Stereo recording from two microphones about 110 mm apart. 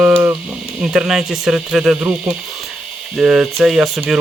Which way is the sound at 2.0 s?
20° right (ahead or behind).